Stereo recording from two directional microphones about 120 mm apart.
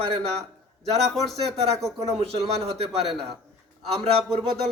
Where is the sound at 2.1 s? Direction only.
55° right (ahead or behind).